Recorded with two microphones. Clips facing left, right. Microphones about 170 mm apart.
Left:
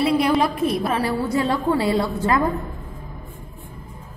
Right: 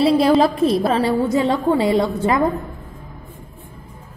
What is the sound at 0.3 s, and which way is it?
A woman's voice, 30° right (ahead or behind).